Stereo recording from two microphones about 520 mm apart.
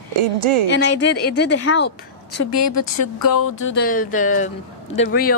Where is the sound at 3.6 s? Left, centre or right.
Centre.